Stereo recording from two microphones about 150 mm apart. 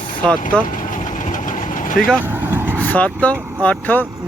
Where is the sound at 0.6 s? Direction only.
60° left (ahead or behind).